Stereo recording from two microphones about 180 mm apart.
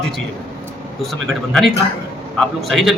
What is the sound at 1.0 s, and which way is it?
A man's voice, centre (ahead or behind).